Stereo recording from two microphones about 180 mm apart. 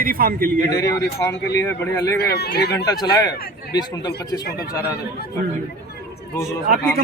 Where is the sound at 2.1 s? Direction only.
65° left (ahead or behind).